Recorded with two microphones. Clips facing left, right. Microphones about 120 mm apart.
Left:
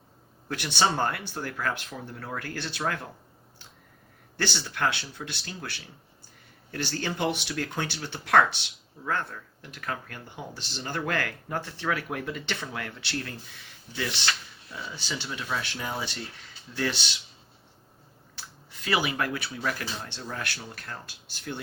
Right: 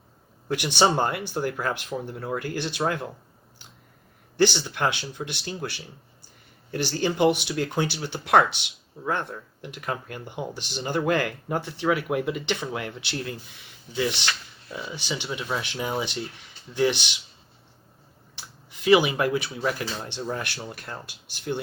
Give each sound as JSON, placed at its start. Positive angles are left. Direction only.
{"t": 0.4, "sound": "speech", "side_deg": -15}
{"t": 4.4, "sound": "speech", "side_deg": -20}
{"t": 14.7, "sound": "speech", "side_deg": -15}
{"t": 18.9, "sound": "speech", "side_deg": -20}